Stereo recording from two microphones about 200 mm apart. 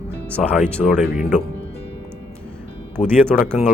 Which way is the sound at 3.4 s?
Centre (ahead or behind).